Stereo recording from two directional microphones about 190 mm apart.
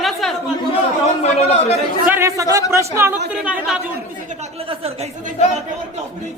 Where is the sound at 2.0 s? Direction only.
15° right (ahead or behind).